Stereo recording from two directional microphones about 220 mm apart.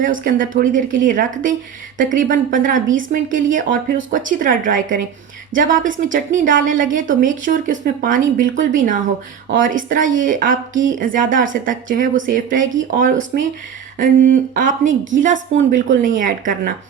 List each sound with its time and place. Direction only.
0.0 s a woman's voice: 40° right (ahead or behind)